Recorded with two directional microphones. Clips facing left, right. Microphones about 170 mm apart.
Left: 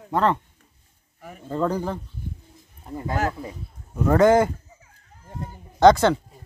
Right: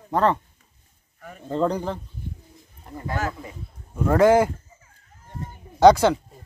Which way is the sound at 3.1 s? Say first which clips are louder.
Left 3 dB; 40° left (ahead or behind).